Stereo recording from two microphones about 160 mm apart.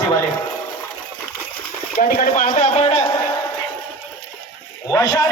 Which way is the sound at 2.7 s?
40° left (ahead or behind).